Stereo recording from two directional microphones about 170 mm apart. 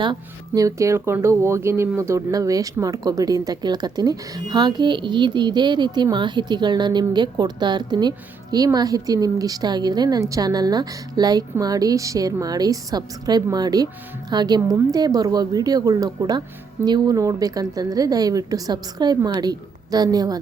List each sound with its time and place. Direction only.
0.0 s speech: 25° right (ahead or behind)